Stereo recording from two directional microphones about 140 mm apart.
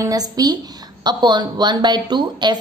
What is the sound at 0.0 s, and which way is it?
A woman's voice, 25° right (ahead or behind).